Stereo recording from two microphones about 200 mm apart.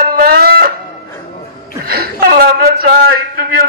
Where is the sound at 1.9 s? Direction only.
50° right (ahead or behind).